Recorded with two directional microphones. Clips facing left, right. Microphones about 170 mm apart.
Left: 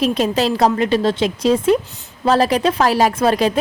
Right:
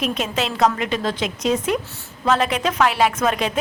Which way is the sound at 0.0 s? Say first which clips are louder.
Left 7 dB; 35° left (ahead or behind).